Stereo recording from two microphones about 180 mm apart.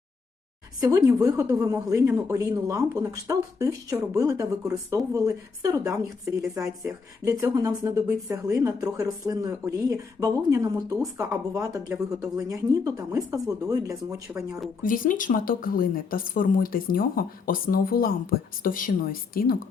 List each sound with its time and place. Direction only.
0.8 s speech: 20° right (ahead or behind)
14.8 s speech: 50° left (ahead or behind)